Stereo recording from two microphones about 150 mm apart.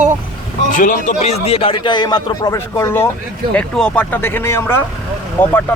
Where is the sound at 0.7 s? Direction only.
60° left (ahead or behind); by 3.0 s 20° left (ahead or behind).